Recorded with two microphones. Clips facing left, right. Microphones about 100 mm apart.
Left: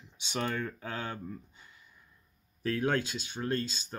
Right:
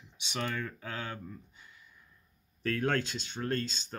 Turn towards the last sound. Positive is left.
turn(degrees=10)  # may be behind; listen again after turning